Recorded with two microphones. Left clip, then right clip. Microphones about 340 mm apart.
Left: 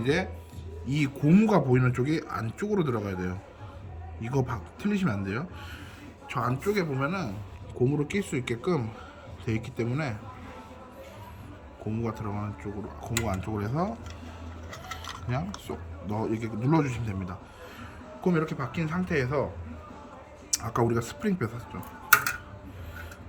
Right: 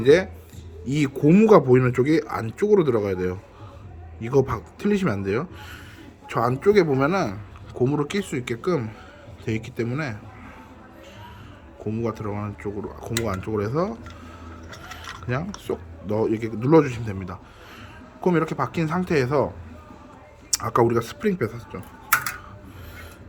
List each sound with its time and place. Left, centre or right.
0.0 s speech: centre
7.8 s speech: centre
11.9 s speech: centre
15.0 s speech: centre
20.5 s speech: centre